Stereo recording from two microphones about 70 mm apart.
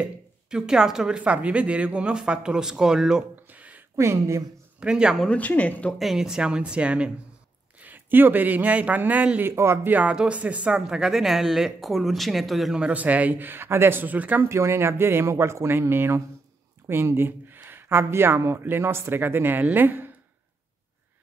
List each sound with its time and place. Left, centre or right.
0.0 s speech: centre
3.4 s a sound: right
3.9 s speech: right
4.7 s speech: centre
5.3 s speech: left
5.9 s speech: centre
7.8 s a man's voice: right
9.5 s speech: right
9.8 s speech: right; by 12.8 s centre
12.8 s speech: right
14.4 s speech: right